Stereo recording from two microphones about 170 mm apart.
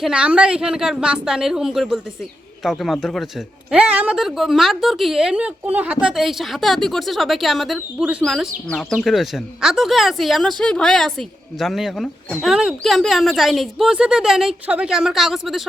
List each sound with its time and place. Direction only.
0.0 s speech: 5° right (ahead or behind)